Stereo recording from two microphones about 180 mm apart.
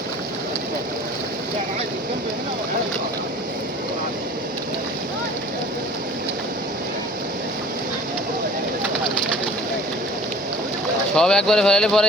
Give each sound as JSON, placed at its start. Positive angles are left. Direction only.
{"t": 11.1, "sound": "speech", "side_deg": 5}